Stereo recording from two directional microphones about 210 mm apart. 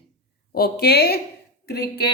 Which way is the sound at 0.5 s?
50° left (ahead or behind).